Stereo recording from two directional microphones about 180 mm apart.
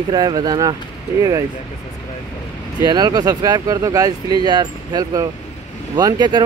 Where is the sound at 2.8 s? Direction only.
20° right (ahead or behind).